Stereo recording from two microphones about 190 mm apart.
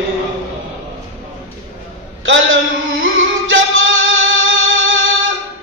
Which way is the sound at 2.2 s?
85° right.